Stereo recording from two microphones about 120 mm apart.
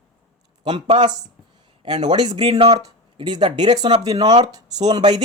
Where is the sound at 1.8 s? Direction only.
40° right (ahead or behind).